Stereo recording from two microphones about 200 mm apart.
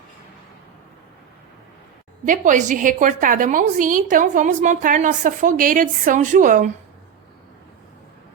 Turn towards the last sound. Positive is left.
turn(degrees=-40)  # may be behind; listen again after turning